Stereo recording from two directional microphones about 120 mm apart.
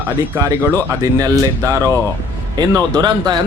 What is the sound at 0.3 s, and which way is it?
Speech, 25° right (ahead or behind).